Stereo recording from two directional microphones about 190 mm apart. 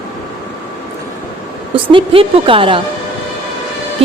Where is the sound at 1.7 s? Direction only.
25° right (ahead or behind).